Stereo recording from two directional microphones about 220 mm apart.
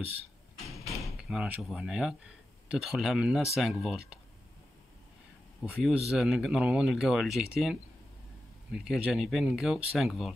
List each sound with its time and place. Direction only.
0.8 s speech: centre (ahead or behind)
5.6 s speech: centre (ahead or behind)
8.7 s speech: 5° right (ahead or behind)